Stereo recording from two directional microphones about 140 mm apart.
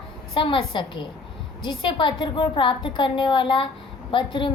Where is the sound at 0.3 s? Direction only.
35° left (ahead or behind).